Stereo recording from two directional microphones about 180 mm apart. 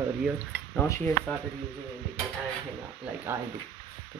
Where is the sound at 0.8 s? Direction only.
15° left (ahead or behind).